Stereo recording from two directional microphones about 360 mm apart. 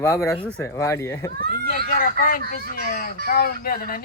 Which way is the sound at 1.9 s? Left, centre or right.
Left.